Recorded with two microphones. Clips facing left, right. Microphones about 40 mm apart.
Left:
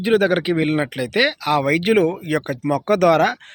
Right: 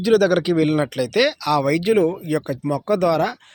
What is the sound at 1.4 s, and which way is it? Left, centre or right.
Speech, left.